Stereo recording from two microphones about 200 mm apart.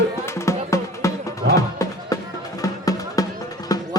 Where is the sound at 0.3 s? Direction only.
15° left (ahead or behind).